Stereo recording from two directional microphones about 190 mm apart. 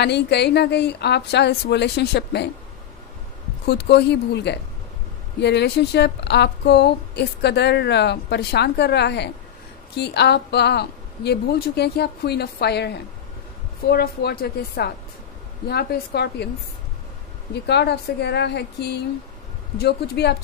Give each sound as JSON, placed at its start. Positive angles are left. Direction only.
{"t": 0.0, "sound": "speech", "side_deg": 60}
{"t": 3.6, "sound": "speech", "side_deg": 60}
{"t": 17.6, "sound": "speech", "side_deg": 60}